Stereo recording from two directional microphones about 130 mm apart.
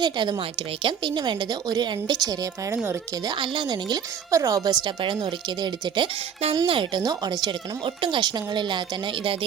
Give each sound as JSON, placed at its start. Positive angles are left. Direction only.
{"t": 0.0, "sound": "a woman's voice", "side_deg": -35}
{"t": 3.3, "sound": "a woman's voice", "side_deg": -40}